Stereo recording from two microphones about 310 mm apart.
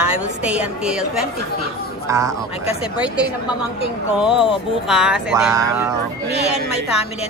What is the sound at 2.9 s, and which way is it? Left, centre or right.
Speech, centre.